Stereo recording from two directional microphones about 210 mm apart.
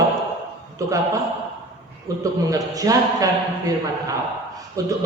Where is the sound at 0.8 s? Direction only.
15° right (ahead or behind).